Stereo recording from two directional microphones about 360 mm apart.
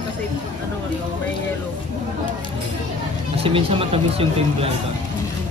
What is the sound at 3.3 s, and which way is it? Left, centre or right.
Speech, centre.